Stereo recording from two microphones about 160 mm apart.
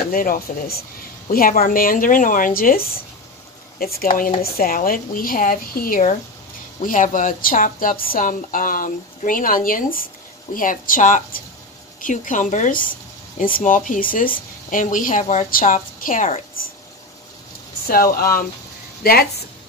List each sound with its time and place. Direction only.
0.1 s a woman's voice: 65° left (ahead or behind)
17.8 s speech: 70° left (ahead or behind)